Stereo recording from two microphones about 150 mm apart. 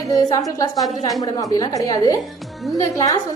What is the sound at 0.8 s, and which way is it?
Speech, centre (ahead or behind).